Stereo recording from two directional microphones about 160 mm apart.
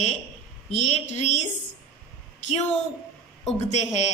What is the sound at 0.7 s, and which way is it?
Speech, 45° left (ahead or behind).